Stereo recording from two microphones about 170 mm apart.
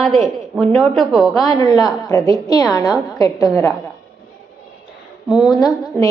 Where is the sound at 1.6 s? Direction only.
25° left (ahead or behind).